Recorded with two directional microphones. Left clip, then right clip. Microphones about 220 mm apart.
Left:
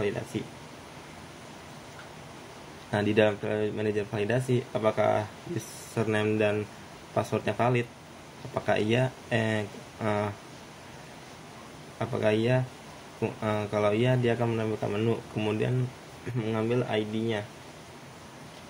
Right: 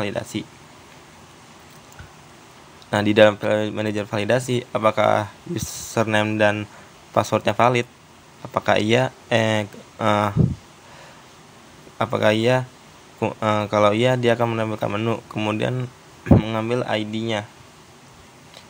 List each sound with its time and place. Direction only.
0.3 s speech: 50° right (ahead or behind)
2.9 s speech: 45° right (ahead or behind)
12.0 s speech: 45° right (ahead or behind)